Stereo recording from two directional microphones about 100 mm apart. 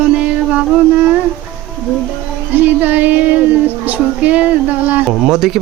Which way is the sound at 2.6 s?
15° right (ahead or behind).